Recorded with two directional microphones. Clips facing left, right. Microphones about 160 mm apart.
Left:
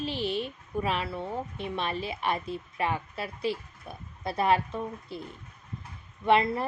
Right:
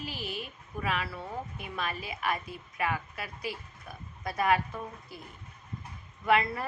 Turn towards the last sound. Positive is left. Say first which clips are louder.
# left 3 dB
turn(degrees=30)  # may be behind; listen again after turning